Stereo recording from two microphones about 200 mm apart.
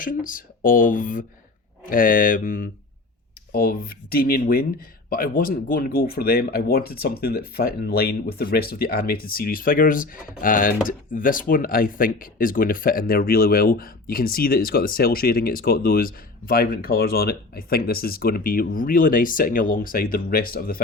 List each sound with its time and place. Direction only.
0.0 s speech: 40° left (ahead or behind)